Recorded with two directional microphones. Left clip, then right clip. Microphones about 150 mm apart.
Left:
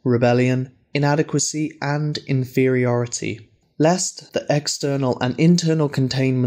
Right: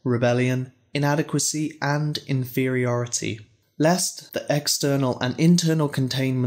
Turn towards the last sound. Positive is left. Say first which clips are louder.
# left 4 dB
turn(degrees=20)  # may be behind; listen again after turning